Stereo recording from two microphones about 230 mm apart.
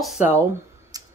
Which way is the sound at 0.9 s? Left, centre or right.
Centre.